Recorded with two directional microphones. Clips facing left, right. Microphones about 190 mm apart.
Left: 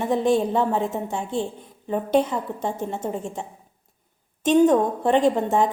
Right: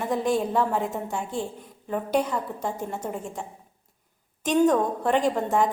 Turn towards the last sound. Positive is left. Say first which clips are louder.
# left 4 dB
turn(degrees=25)  # may be behind; listen again after turning